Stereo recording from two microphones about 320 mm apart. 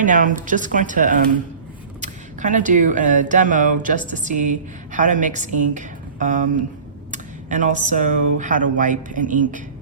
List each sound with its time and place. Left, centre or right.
0.0 s speech: right